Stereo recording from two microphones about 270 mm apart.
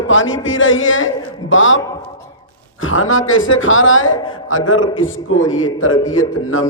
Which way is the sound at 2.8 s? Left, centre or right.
Left.